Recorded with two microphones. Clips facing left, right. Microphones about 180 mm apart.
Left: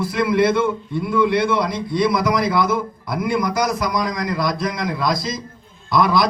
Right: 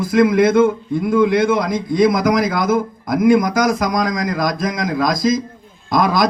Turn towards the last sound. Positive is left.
turn(degrees=-45)  # may be behind; listen again after turning